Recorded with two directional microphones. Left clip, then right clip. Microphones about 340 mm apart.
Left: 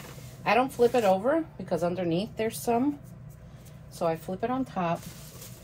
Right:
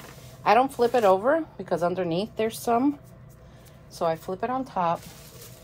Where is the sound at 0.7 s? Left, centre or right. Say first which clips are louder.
Right 2 dB; right.